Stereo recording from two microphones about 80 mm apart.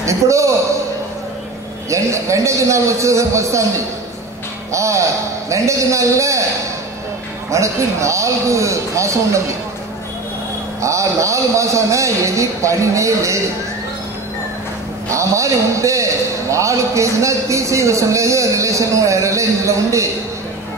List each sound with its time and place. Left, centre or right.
0.0 s a man's voice: right
1.9 s a man's voice: right
4.7 s a man's voice: right
7.5 s a man's voice: right
10.8 s a man's voice: right
15.0 s a man's voice: right